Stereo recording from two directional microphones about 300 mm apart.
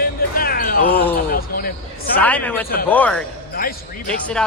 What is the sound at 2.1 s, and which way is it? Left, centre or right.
Speech, centre.